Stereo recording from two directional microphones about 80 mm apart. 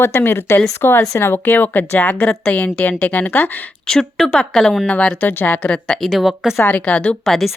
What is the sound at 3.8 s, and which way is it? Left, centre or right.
Speech, centre.